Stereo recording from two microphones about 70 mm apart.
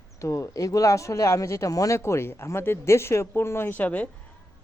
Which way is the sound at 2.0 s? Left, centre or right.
Left.